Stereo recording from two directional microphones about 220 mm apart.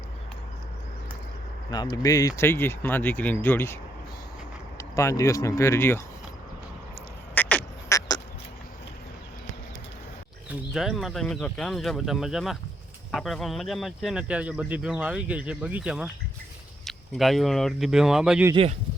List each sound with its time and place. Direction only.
1.7 s speech: 20° left (ahead or behind)
4.8 s speech: 15° left (ahead or behind)
7.3 s a sound: 5° left (ahead or behind)
10.5 s speech: centre (ahead or behind)
18.5 s speech: 25° right (ahead or behind)